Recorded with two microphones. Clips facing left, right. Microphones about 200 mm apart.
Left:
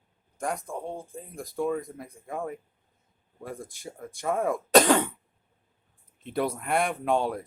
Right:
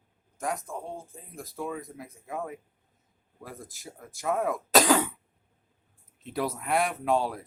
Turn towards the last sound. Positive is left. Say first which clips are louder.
# left 1 dB
turn(degrees=0)  # may be behind; listen again after turning